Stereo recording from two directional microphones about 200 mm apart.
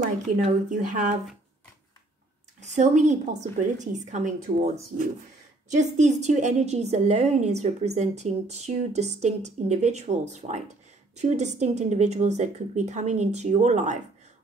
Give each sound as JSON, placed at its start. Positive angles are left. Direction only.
{"t": 0.5, "sound": "a woman's voice", "side_deg": -40}
{"t": 2.6, "sound": "a woman's voice", "side_deg": -35}